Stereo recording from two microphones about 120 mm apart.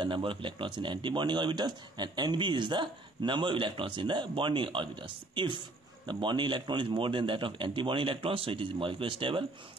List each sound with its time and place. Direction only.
0.0 s a man's voice: 45° right (ahead or behind)